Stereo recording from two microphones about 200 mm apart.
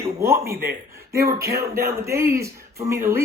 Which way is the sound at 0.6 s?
50° right (ahead or behind).